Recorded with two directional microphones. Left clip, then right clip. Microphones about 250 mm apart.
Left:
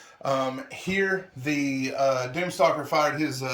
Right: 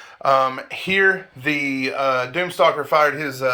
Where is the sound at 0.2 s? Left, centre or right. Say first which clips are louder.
Right 9 dB; centre.